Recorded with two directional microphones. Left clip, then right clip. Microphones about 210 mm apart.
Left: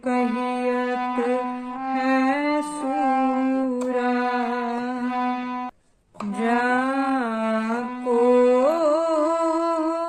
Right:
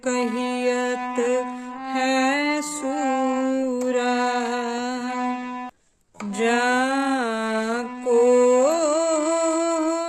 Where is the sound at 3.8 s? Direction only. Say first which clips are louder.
Right 2 dB; 45° right (ahead or behind).